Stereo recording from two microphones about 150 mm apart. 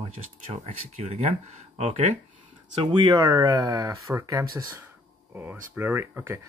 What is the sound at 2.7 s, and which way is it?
Speech, 35° right (ahead or behind).